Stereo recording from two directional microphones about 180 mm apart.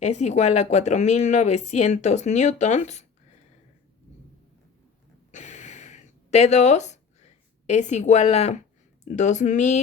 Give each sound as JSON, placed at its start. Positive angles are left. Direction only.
{"t": 0.0, "sound": "speech", "side_deg": 40}
{"t": 5.3, "sound": "a sound", "side_deg": 40}
{"t": 9.0, "sound": "speech", "side_deg": 45}